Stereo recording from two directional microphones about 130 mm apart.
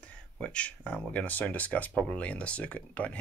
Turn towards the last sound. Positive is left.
turn(degrees=10)  # may be behind; listen again after turning